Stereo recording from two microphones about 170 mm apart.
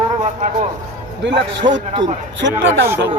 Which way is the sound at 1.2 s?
90° right.